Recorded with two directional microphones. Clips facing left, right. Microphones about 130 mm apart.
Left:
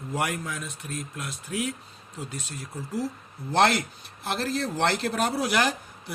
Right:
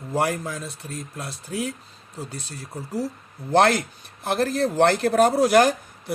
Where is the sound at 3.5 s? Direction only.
50° right (ahead or behind).